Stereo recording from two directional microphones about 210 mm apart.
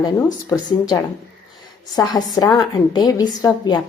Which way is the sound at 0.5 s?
15° left (ahead or behind).